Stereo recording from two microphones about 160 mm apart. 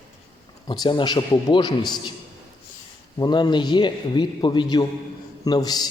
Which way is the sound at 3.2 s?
25° left (ahead or behind).